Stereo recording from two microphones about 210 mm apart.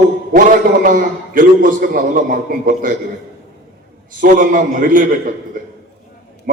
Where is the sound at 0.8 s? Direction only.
40° right (ahead or behind).